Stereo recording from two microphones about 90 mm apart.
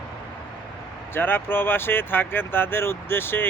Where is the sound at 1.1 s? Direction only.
25° left (ahead or behind).